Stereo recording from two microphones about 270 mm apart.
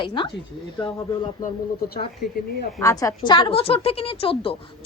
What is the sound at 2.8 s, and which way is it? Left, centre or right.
A woman's voice, centre.